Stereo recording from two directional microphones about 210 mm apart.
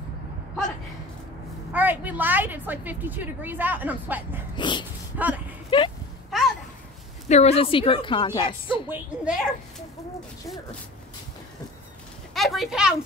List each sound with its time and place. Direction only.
1.7 s a woman's voice: 10° right (ahead or behind)
4.6 s speech: 20° left (ahead or behind)
5.1 s a woman's voice: 5° right (ahead or behind)
5.7 s speech: 25° left (ahead or behind)
7.2 s speech: 30° left (ahead or behind)
8.8 s a child's voice: 5° right (ahead or behind)
12.4 s speech: centre (ahead or behind)